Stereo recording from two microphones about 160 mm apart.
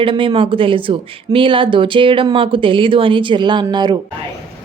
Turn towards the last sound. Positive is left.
turn(degrees=-25)  # may be behind; listen again after turning